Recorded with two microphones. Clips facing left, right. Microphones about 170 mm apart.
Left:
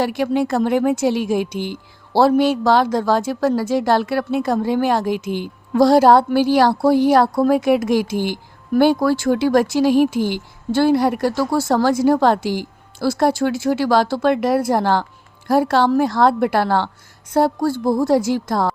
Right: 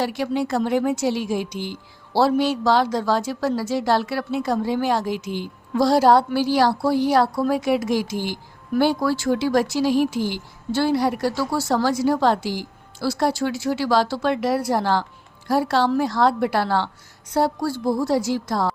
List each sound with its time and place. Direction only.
0.0 s a woman's voice: 55° left (ahead or behind)